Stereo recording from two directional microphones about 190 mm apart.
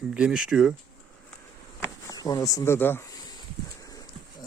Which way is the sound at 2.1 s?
20° left (ahead or behind).